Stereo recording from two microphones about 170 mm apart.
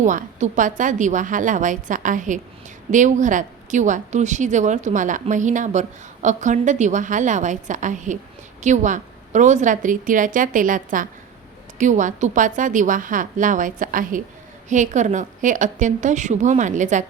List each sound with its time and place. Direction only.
0.0 s a woman's voice: 45° right (ahead or behind)